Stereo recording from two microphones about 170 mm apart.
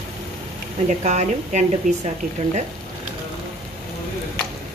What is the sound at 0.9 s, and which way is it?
Speech, 45° right (ahead or behind).